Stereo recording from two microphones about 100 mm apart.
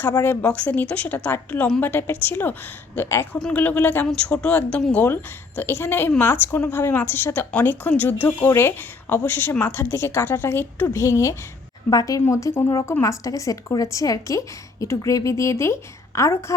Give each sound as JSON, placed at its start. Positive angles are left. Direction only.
{"t": 0.4, "sound": "a woman's voice", "side_deg": 15}
{"t": 3.3, "sound": "a woman's voice", "side_deg": 10}